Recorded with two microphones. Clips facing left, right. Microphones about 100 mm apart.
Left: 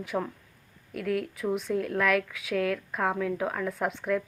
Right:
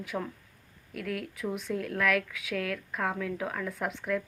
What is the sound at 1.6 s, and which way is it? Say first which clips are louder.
A woman's voice: left 1 dB; 5° left (ahead or behind).